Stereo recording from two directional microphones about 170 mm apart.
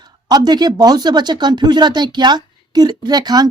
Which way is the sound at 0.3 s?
25° right (ahead or behind).